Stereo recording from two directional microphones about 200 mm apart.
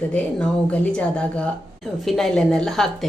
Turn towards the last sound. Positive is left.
turn(degrees=0)  # may be behind; listen again after turning